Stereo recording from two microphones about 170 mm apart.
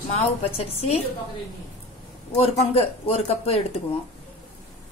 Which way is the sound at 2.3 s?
35° left (ahead or behind).